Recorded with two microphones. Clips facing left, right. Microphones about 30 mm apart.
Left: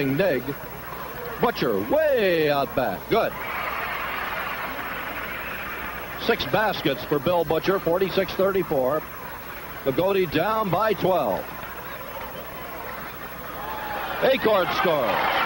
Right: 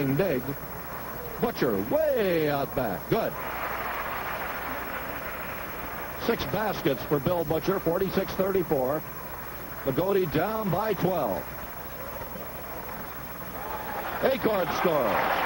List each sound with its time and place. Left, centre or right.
0.0 s speech: left
1.4 s speech: left
1.9 s a sound: left
6.2 s speech: left
8.7 s speech: centre
9.8 s speech: left
13.7 s a man's voice: left